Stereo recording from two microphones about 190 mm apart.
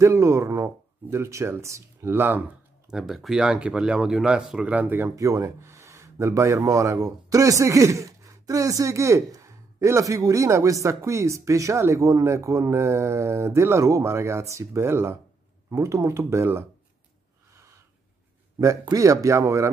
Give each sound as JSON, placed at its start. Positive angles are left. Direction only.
{"t": 0.0, "sound": "speech", "side_deg": -15}
{"t": 18.6, "sound": "speech", "side_deg": -15}